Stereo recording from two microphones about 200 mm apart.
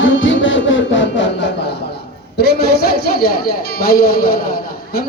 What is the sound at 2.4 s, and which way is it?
A woman's voice, 55° left (ahead or behind).